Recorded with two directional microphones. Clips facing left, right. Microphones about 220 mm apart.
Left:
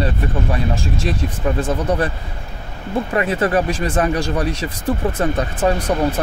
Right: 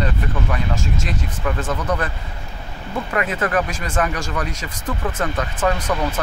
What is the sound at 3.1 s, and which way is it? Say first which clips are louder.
Speech: left 3 dB; 30° left (ahead or behind).